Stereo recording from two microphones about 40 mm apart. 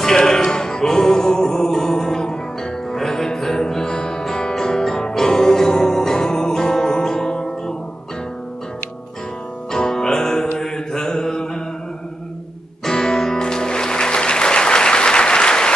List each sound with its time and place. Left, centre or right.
0.0 s music: centre
9.7 s music: centre
10.6 s mantra: centre
12.8 s music: centre